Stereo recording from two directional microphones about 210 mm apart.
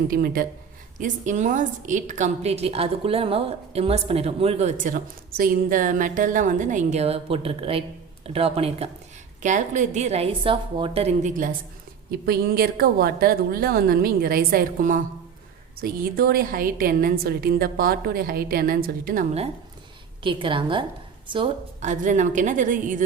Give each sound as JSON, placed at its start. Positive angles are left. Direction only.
{"t": 0.1, "sound": "a woman's voice", "side_deg": -45}
{"t": 20.2, "sound": "a woman's voice", "side_deg": -25}